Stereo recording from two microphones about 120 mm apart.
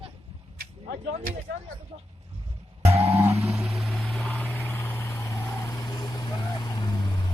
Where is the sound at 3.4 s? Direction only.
Centre (ahead or behind).